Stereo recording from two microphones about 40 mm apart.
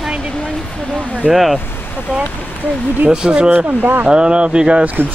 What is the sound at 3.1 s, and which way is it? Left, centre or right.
Speech, right.